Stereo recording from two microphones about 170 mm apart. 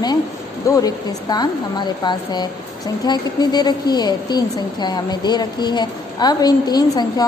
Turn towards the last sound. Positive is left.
turn(degrees=25)  # may be behind; listen again after turning